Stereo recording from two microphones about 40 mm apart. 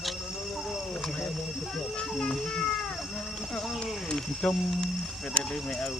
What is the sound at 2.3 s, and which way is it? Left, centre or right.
A child's voice, centre.